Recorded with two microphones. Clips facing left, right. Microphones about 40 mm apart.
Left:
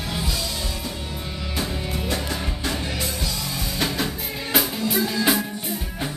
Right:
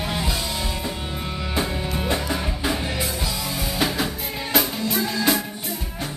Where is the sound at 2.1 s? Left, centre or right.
Centre.